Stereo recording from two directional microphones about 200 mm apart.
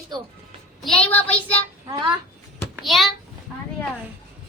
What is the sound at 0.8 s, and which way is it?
Child singing, 5° left (ahead or behind).